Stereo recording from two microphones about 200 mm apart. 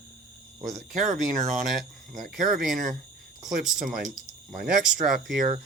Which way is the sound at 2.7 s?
40° right (ahead or behind).